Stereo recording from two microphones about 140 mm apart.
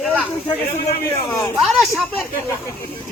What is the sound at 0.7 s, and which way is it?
Speech, 20° left (ahead or behind).